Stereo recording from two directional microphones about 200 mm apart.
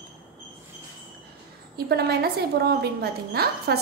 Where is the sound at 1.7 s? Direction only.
50° right (ahead or behind).